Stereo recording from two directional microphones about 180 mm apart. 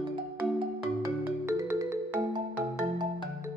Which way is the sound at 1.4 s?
15° right (ahead or behind).